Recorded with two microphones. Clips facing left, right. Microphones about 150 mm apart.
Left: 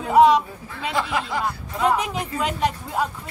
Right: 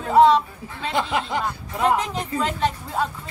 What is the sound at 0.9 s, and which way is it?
Speech, 20° right (ahead or behind).